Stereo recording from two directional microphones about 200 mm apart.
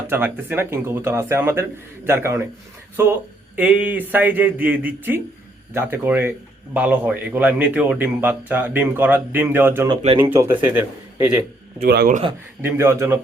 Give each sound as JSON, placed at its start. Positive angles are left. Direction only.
{"t": 0.1, "sound": "speech", "side_deg": -10}
{"t": 11.9, "sound": "a man's voice", "side_deg": -45}
{"t": 12.6, "sound": "speech", "side_deg": -15}